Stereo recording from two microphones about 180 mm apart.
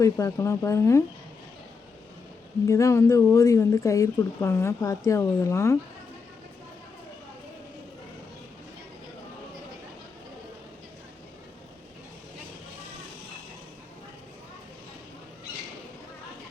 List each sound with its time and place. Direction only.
0.0 s speech: 15° left (ahead or behind)
2.6 s speech: 15° left (ahead or behind)